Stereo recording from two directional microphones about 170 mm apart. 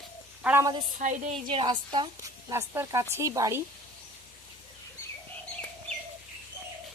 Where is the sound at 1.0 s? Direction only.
50° right (ahead or behind).